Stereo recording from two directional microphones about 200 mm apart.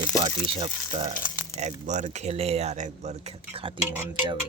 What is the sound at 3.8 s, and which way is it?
Speech, 10° right (ahead or behind).